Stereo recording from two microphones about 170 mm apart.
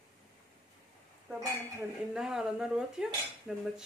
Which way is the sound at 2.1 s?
5° right (ahead or behind).